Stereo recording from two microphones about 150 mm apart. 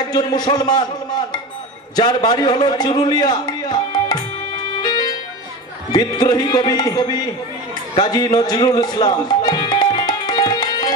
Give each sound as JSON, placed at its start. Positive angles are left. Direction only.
{"t": 0.1, "sound": "a man's voice", "side_deg": 25}
{"t": 4.8, "sound": "music", "side_deg": 25}
{"t": 5.9, "sound": "a man's voice", "side_deg": 30}
{"t": 7.9, "sound": "music", "side_deg": 30}